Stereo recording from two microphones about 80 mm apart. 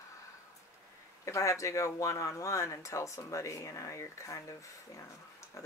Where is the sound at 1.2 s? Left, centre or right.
Left.